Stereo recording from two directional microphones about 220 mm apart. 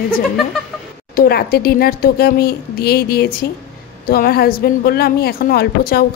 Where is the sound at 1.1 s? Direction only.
45° left (ahead or behind).